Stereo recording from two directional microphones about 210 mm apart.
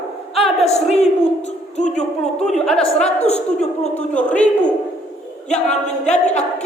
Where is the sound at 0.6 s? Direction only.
30° left (ahead or behind).